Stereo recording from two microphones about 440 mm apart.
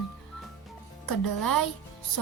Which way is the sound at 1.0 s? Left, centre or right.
Left.